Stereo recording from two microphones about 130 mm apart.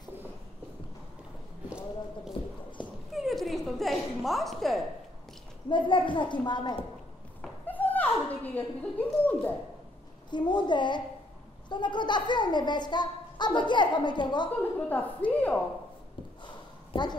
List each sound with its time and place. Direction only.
1.7 s a sound: 5° right (ahead or behind)
5.7 s a woman's voice: 40° left (ahead or behind)
7.6 s a sound: 15° left (ahead or behind)
8.5 s a woman's voice: 10° left (ahead or behind)
10.3 s a woman's voice: 35° left (ahead or behind)
14.9 s a woman's voice: 15° left (ahead or behind)
16.9 s speech: 35° left (ahead or behind)